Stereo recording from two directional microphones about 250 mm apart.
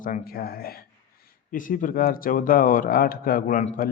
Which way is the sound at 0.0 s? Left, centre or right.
Left.